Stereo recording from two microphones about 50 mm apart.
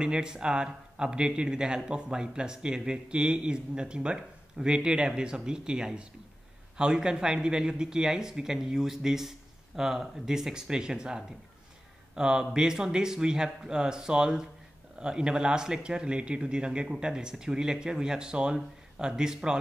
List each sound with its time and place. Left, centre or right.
0.0 s speech: centre